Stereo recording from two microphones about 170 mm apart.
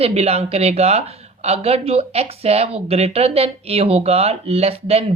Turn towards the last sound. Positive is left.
turn(degrees=-35)  # may be behind; listen again after turning